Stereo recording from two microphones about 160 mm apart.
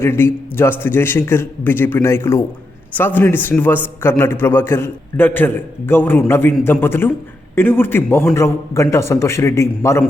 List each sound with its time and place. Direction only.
0.0 s a man's voice: 15° left (ahead or behind)